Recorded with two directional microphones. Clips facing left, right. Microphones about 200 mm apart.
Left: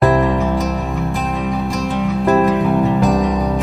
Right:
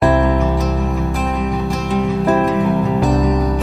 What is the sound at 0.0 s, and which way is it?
Music, centre (ahead or behind).